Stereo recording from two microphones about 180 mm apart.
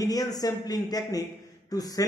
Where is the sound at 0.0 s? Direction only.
20° left (ahead or behind).